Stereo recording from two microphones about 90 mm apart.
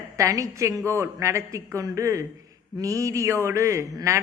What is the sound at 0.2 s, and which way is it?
A man's voice, 35° right (ahead or behind).